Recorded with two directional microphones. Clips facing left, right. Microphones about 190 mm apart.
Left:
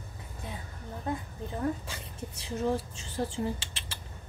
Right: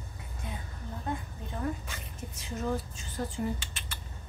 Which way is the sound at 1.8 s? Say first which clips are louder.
Left 2 dB; 30° left (ahead or behind).